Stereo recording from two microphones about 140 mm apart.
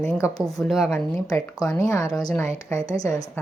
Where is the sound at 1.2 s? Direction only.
25° left (ahead or behind).